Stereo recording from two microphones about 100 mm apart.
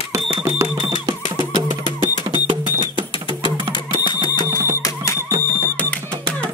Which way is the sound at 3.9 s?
50° left (ahead or behind).